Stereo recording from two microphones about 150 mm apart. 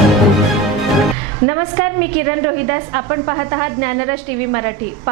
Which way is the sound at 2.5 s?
30° right (ahead or behind).